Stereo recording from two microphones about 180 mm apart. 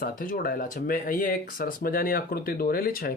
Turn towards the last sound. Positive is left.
turn(degrees=55)  # may be behind; listen again after turning